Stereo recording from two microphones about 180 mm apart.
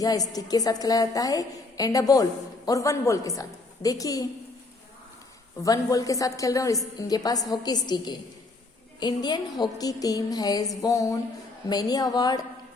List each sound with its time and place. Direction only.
0.0 s a woman's voice: 20° left (ahead or behind)
5.6 s a woman's voice: 20° left (ahead or behind)